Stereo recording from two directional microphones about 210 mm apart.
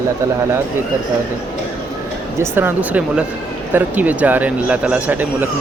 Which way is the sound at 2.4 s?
10° right (ahead or behind).